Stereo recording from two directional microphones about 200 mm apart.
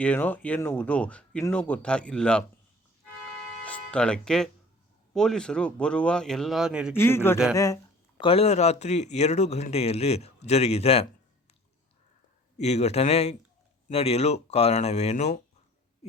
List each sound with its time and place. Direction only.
0.0 s speech: 10° left (ahead or behind)
3.2 s music: 5° left (ahead or behind)
5.1 s speech: 5° left (ahead or behind)
6.9 s speech: 10° left (ahead or behind)
8.2 s speech: 30° left (ahead or behind)
12.5 s speech: 35° left (ahead or behind)